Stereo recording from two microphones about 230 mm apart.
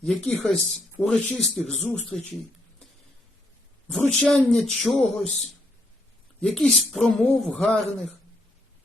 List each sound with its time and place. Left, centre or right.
0.0 s speech: centre
3.8 s speech: centre